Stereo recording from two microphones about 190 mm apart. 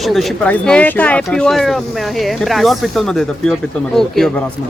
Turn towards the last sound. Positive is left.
turn(degrees=0)  # may be behind; listen again after turning